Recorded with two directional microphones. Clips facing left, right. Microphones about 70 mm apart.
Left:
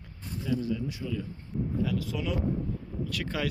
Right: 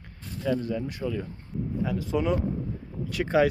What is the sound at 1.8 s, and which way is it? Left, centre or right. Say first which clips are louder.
Speech: right 7 dB; right.